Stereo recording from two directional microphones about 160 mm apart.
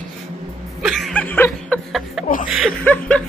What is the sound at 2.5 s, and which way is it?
Chuckle, centre (ahead or behind).